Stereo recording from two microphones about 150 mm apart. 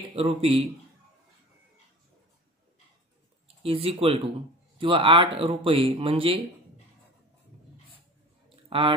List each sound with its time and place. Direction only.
0.1 s speech: 40° right (ahead or behind)
3.6 s speech: 40° right (ahead or behind)
8.6 s a sound: 35° right (ahead or behind)